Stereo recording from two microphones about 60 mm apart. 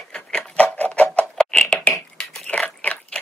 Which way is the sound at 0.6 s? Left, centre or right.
Left.